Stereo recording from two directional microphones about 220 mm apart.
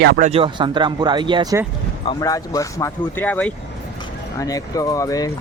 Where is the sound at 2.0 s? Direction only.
15° left (ahead or behind).